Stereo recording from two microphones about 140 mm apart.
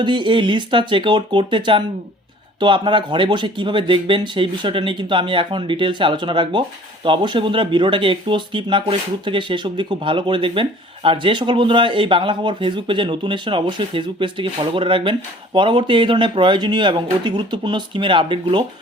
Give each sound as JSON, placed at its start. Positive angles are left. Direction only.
{"t": 0.0, "sound": "speech", "side_deg": -35}